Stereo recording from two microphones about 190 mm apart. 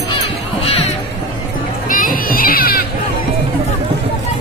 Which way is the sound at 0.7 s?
30° left (ahead or behind).